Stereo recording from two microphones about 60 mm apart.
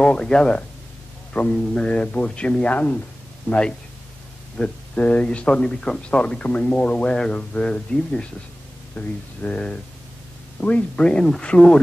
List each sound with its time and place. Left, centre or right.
0.0 s speech: centre